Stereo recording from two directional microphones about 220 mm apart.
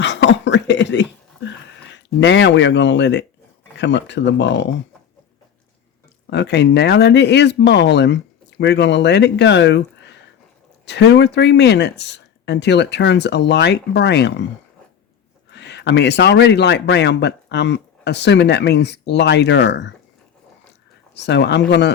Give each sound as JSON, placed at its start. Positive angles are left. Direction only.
{"t": 0.0, "sound": "a sound", "side_deg": 55}
{"t": 1.5, "sound": "speech", "side_deg": 55}
{"t": 6.3, "sound": "speech", "side_deg": 50}
{"t": 15.4, "sound": "speech", "side_deg": 50}
{"t": 21.2, "sound": "speech", "side_deg": 50}